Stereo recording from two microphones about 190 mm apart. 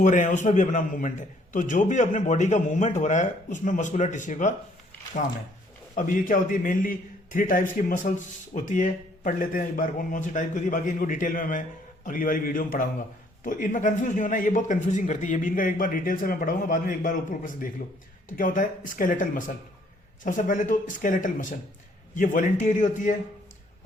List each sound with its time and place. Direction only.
0.0 s speech: 40° left (ahead or behind)
5.9 s a man's voice: 45° left (ahead or behind)